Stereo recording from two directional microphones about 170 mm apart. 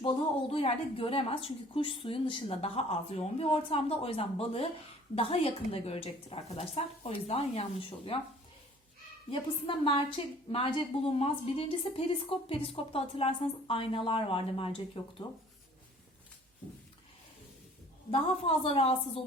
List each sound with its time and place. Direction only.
0.0 s a woman's voice: 35° left (ahead or behind)
9.3 s a woman's voice: 30° left (ahead or behind)
18.1 s a woman's voice: 35° left (ahead or behind)